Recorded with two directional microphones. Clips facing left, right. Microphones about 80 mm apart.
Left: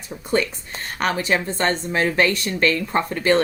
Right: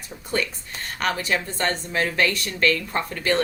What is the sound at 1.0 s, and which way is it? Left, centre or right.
A woman's voice, left.